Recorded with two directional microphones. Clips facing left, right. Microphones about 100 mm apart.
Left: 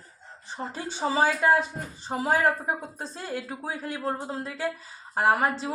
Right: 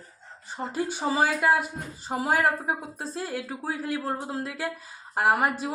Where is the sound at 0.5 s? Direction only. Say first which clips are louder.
Right 4 dB; 10° right (ahead or behind).